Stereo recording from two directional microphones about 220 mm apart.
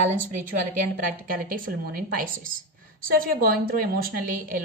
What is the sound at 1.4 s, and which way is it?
Speech, 40° right (ahead or behind).